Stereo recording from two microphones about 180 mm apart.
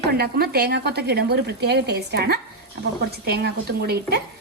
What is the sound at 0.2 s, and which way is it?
Sizzle, 65° right (ahead or behind).